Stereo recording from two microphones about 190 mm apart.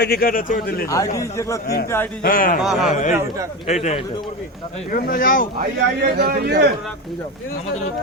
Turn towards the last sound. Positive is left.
turn(degrees=-55)  # may be behind; listen again after turning